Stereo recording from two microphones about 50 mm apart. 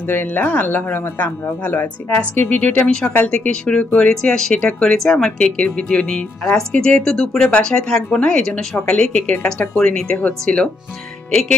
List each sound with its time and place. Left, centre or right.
0.0 s speech: left
3.3 s speech: centre
4.6 s speech: left
4.9 s speech: centre